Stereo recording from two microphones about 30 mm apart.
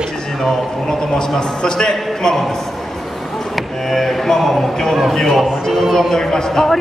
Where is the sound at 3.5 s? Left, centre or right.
Centre.